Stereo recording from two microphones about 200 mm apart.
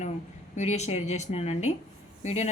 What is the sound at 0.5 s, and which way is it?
A woman's voice, 35° left (ahead or behind).